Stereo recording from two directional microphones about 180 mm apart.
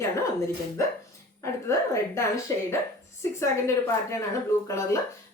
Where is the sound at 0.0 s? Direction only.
15° left (ahead or behind).